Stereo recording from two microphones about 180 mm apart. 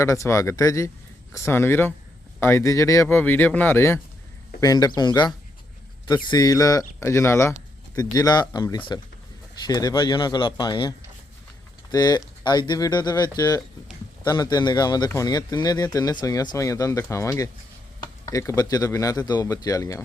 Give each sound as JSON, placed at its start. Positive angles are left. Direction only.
{"t": 0.0, "sound": "speech", "side_deg": 15}